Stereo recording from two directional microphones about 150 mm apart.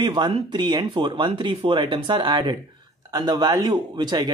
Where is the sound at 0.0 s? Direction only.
30° right (ahead or behind).